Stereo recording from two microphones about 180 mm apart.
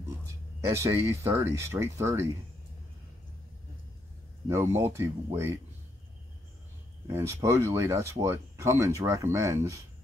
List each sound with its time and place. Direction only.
0.7 s speech: 15° right (ahead or behind)
4.5 s speech: 15° right (ahead or behind)
7.1 s speech: 15° right (ahead or behind)